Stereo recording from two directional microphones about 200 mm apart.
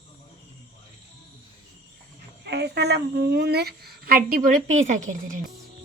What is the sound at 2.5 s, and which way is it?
A woman's voice, 55° right (ahead or behind).